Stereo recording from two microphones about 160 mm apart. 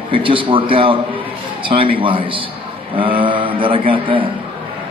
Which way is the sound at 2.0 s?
30° right (ahead or behind).